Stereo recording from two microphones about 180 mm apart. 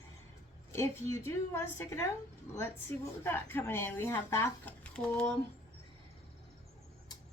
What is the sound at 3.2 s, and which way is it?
Speech, 10° left (ahead or behind).